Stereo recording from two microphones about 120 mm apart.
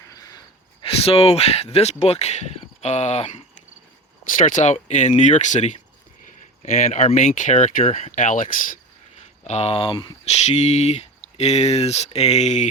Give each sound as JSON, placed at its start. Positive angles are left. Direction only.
{"t": 0.8, "sound": "speech", "side_deg": 50}
{"t": 4.4, "sound": "speech", "side_deg": 90}
{"t": 9.4, "sound": "speech", "side_deg": 65}
{"t": 10.2, "sound": "speech", "side_deg": 70}